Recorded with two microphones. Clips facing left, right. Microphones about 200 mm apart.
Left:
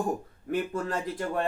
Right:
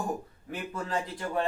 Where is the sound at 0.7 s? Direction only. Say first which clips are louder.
Left 2 dB; 45° left (ahead or behind).